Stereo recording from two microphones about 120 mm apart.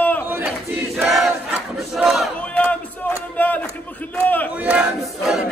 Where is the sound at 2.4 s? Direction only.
10° left (ahead or behind).